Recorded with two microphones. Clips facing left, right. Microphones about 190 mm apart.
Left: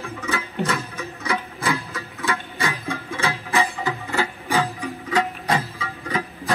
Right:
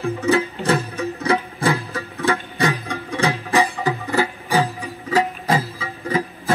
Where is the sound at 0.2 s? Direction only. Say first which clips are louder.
Right 5 dB; 35° right (ahead or behind).